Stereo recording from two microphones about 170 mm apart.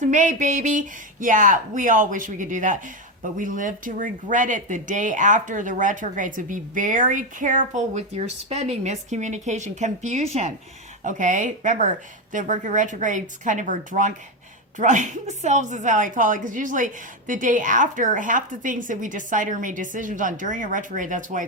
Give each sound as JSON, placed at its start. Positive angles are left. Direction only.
{"t": 0.0, "sound": "speech", "side_deg": -45}